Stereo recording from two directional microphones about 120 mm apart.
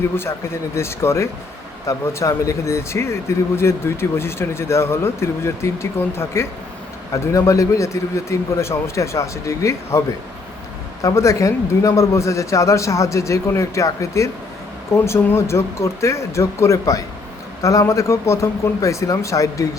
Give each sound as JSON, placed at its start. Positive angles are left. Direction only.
{"t": 0.2, "sound": "speech", "side_deg": 20}
{"t": 11.0, "sound": "speech", "side_deg": 25}